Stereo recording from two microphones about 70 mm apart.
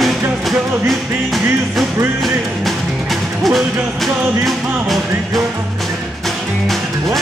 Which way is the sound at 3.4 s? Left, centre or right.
Centre.